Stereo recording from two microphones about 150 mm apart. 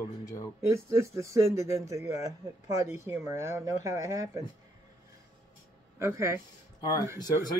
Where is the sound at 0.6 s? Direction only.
20° right (ahead or behind).